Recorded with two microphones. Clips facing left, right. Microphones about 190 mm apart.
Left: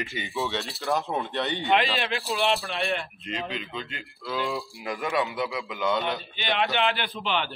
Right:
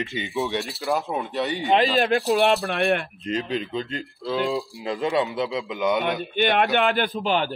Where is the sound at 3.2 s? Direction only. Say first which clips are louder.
Right 8 dB; 40° right (ahead or behind); by 6.2 s 15° right (ahead or behind).